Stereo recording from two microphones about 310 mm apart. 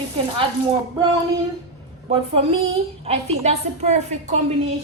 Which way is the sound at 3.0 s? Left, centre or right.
Right.